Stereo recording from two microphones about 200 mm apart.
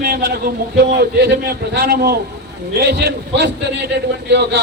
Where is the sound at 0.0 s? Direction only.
50° right (ahead or behind).